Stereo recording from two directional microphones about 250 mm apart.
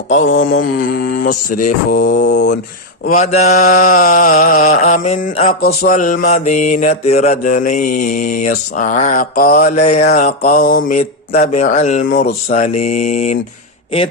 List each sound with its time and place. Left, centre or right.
0.1 s mantra: left
0.6 s mantra: left
3.1 s mantra: left